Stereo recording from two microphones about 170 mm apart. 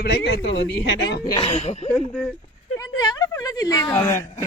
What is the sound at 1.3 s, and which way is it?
Speech, 35° left (ahead or behind).